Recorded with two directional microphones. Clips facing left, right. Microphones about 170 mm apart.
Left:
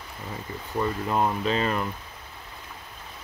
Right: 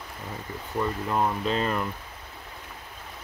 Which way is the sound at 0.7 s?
15° left (ahead or behind).